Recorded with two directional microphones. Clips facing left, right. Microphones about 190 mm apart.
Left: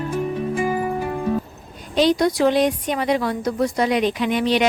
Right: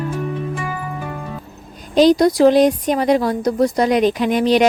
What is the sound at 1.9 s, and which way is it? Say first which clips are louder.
A woman's voice: right 5 dB; 40° right (ahead or behind).